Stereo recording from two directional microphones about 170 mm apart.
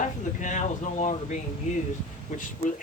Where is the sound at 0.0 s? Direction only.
45° left (ahead or behind).